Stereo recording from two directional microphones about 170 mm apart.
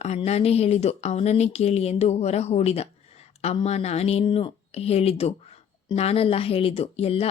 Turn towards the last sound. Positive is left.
turn(degrees=35)  # may be behind; listen again after turning